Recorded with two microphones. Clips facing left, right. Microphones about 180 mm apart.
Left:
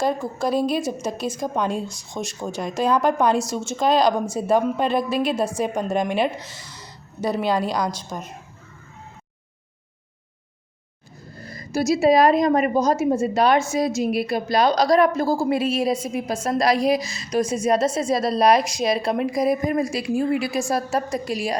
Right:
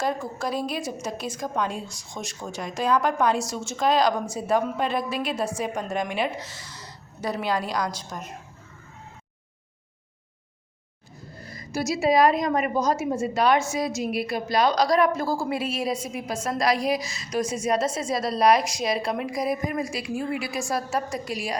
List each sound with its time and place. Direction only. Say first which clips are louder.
0.0 s a woman's voice: left 5 dB; 30° left (ahead or behind)
7.2 s a woman's voice: left 5 dB; 25° left (ahead or behind)
11.4 s a woman's voice: left 6 dB; 35° left (ahead or behind)